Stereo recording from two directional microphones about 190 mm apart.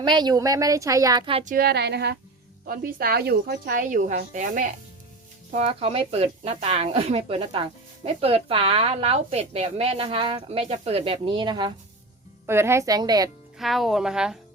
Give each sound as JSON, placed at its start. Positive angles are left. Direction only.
{"t": 0.0, "sound": "a woman's voice", "side_deg": -25}
{"t": 1.5, "sound": "a woman's voice", "side_deg": -55}
{"t": 2.6, "sound": "speech", "side_deg": -50}
{"t": 12.5, "sound": "a woman's voice", "side_deg": -15}
{"t": 13.6, "sound": "a woman's voice", "side_deg": 0}